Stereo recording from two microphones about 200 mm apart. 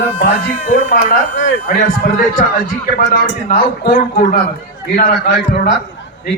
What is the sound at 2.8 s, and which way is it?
A man's voice, 45° left (ahead or behind).